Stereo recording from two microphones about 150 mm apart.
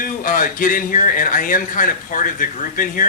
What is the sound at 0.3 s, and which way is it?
Speech, 65° left (ahead or behind).